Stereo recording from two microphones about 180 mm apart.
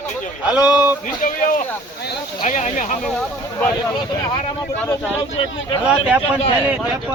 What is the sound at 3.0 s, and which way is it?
Speech, 5° left (ahead or behind).